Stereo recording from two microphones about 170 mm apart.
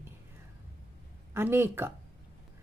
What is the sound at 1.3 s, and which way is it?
Speech, 15° right (ahead or behind).